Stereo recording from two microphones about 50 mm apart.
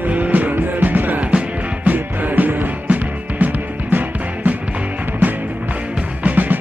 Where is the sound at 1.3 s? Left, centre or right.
Right.